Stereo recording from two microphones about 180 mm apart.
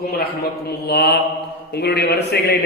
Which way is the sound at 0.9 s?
65° left (ahead or behind).